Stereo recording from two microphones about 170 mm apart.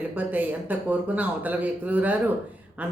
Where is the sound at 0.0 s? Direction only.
10° right (ahead or behind).